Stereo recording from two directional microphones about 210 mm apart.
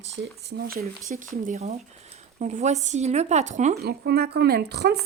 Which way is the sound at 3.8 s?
50° right (ahead or behind).